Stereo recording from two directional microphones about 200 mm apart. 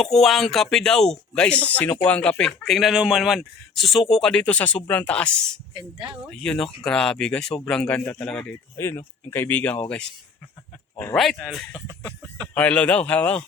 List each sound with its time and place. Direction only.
0.0 s speech: centre (ahead or behind)
5.7 s speech: 20° right (ahead or behind)
6.3 s speech: 5° left (ahead or behind)
10.9 s speech: 5° left (ahead or behind)